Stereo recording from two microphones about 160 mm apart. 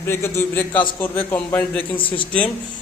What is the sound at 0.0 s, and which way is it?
A man's voice, 15° left (ahead or behind).